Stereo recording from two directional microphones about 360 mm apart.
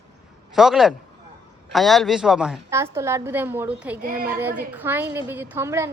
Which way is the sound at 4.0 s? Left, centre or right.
Right.